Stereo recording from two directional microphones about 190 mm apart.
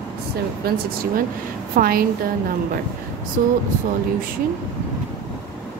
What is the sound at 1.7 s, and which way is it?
Speech, 50° right (ahead or behind).